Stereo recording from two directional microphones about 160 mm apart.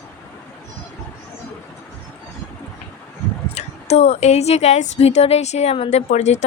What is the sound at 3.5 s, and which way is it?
A woman's voice, 45° left (ahead or behind).